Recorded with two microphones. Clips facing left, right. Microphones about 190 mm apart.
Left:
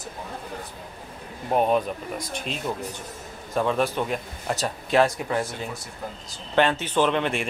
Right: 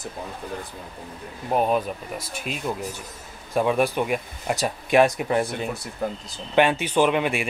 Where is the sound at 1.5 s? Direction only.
Centre (ahead or behind); by 5.4 s 20° right (ahead or behind).